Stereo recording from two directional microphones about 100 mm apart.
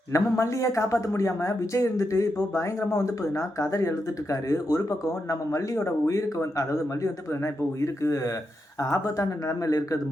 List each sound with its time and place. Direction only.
0.1 s speech: 30° left (ahead or behind)